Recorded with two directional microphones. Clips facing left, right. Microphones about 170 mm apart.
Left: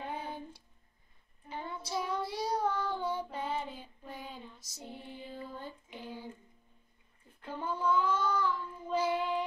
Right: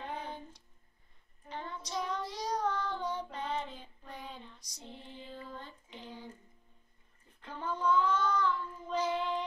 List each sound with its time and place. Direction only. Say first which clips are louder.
0.0 s a sound: left 1 dB; 10° left (ahead or behind)
1.5 s child singing: left 2 dB; 10° left (ahead or behind)
7.4 s child singing: even; 10° left (ahead or behind)